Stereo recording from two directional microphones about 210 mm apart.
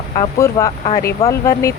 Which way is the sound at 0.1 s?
20° left (ahead or behind).